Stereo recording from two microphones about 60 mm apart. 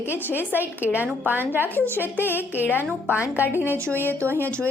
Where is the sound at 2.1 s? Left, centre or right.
Left.